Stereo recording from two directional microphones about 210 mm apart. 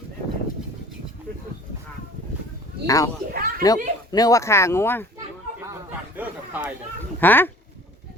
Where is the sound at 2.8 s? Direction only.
15° left (ahead or behind).